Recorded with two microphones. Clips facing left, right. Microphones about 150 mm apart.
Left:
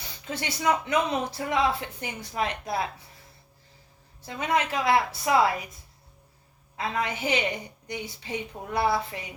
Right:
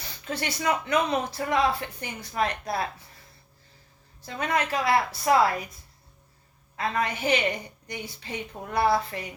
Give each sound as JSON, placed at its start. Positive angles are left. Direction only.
{"t": 0.3, "sound": "speech", "side_deg": 20}
{"t": 4.4, "sound": "speech", "side_deg": 15}
{"t": 6.7, "sound": "a woman's voice", "side_deg": 20}